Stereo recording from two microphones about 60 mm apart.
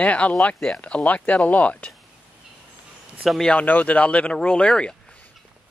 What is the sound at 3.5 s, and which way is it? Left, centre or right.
Speech, left.